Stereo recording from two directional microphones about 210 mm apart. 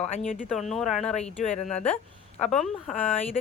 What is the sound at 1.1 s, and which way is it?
Speech, 35° left (ahead or behind).